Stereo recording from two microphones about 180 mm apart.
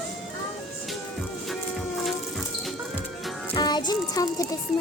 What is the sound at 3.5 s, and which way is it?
Music, 25° left (ahead or behind).